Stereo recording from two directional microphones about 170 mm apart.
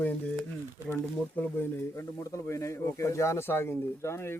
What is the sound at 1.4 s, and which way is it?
Speech, 10° left (ahead or behind).